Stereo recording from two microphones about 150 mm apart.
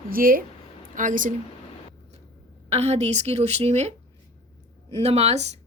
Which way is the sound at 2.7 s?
45° right (ahead or behind).